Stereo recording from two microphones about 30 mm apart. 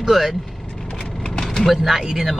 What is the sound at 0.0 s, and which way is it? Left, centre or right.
Speech, centre.